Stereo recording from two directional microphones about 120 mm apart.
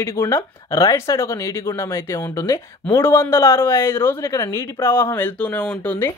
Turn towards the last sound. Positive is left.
turn(degrees=15)  # may be behind; listen again after turning